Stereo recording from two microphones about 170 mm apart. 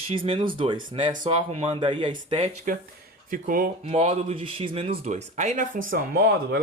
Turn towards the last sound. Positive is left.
turn(degrees=-65)  # may be behind; listen again after turning